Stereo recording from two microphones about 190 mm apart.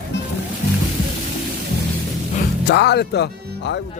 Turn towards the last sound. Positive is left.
turn(degrees=60)  # may be behind; listen again after turning